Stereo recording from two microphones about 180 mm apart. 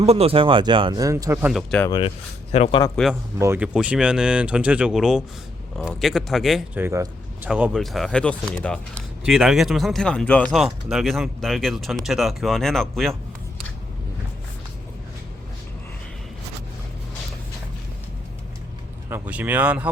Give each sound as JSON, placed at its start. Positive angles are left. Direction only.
{"t": 0.0, "sound": "speech", "side_deg": -35}
{"t": 1.9, "sound": "speech", "side_deg": 30}
{"t": 2.9, "sound": "speech", "side_deg": 0}
{"t": 3.3, "sound": "speech", "side_deg": -15}
{"t": 6.8, "sound": "speech", "side_deg": -15}
{"t": 19.1, "sound": "speech", "side_deg": -10}